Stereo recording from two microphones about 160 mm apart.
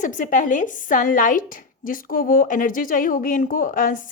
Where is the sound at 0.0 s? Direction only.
55° left (ahead or behind).